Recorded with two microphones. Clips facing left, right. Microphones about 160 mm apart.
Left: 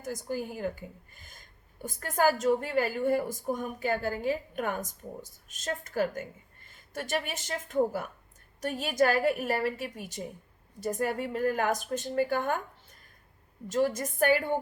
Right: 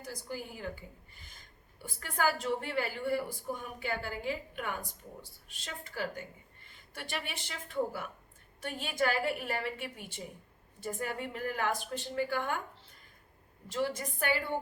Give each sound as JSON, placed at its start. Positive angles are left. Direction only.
{"t": 0.0, "sound": "a woman's voice", "side_deg": 45}
{"t": 13.7, "sound": "a woman's voice", "side_deg": 45}